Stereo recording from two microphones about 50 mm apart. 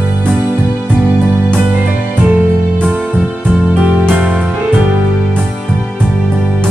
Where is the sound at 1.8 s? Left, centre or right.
Right.